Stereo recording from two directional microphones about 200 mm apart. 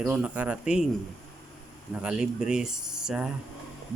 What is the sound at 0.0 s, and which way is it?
Speech, 5° right (ahead or behind).